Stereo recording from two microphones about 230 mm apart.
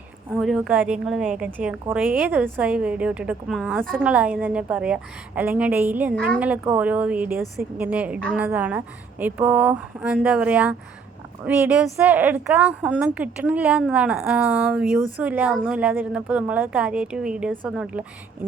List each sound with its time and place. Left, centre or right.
0.3 s a woman's voice: centre
6.1 s a woman's voice: centre
6.4 s a woman's voice: centre